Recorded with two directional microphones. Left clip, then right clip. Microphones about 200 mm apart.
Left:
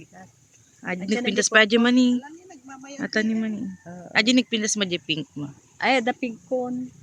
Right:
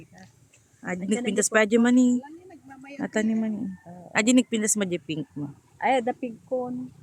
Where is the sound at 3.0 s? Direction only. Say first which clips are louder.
Left 2 dB; centre (ahead or behind).